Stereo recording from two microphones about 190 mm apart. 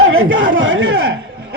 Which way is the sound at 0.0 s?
90° right.